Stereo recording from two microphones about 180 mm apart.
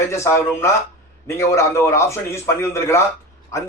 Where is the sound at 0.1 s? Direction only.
15° left (ahead or behind).